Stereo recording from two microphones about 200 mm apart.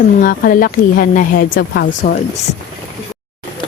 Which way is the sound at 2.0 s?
40° left (ahead or behind).